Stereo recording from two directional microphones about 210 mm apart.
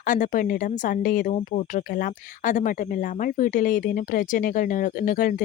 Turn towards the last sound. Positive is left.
turn(degrees=40)  # may be behind; listen again after turning